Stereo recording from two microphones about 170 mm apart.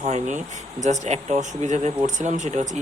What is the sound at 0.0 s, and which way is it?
Speech, 45° right (ahead or behind).